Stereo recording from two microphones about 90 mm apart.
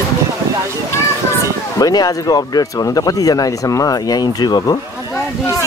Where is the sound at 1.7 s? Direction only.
45° left (ahead or behind).